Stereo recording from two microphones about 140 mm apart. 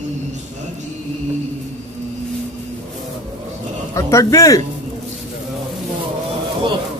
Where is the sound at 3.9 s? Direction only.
25° left (ahead or behind).